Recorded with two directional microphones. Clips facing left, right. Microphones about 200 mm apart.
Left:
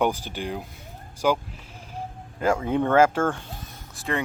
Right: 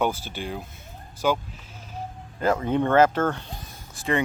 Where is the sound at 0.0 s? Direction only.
15° left (ahead or behind).